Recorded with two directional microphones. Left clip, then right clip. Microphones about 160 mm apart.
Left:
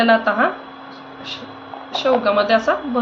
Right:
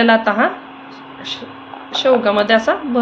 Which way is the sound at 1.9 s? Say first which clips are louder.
Right 3 dB; 35° right (ahead or behind).